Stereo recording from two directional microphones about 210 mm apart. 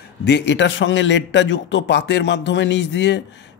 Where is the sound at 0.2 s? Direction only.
55° left (ahead or behind).